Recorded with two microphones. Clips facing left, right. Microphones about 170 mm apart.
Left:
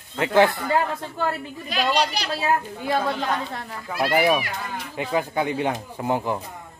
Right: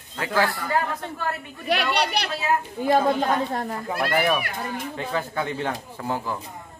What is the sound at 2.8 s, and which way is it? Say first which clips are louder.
Speech: right 7 dB; 45° right (ahead or behind).